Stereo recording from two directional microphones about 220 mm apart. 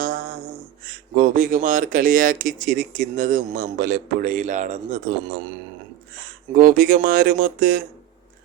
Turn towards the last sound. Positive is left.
turn(degrees=-40)  # may be behind; listen again after turning